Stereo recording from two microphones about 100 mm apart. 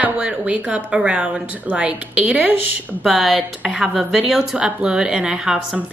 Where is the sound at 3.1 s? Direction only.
Centre (ahead or behind).